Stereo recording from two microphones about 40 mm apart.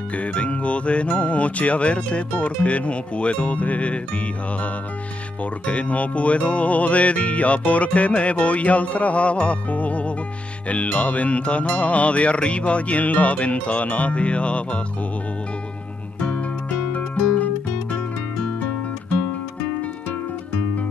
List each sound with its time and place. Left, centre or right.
0.1 s music: left
5.4 s music: left
16.2 s music: left